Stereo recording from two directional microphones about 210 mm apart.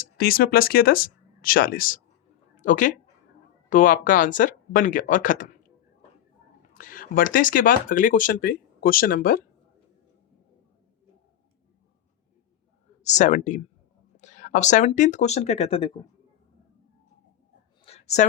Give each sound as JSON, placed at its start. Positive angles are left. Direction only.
{"t": 0.0, "sound": "speech", "side_deg": 45}
{"t": 6.7, "sound": "speech", "side_deg": 40}
{"t": 13.0, "sound": "speech", "side_deg": 35}
{"t": 17.8, "sound": "a sound", "side_deg": 30}